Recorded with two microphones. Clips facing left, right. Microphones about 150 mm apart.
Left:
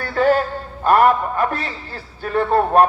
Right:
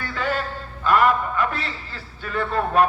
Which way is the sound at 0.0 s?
45° left (ahead or behind).